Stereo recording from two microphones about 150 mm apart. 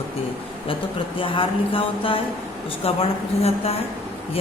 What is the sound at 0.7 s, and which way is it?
Speech, 35° left (ahead or behind).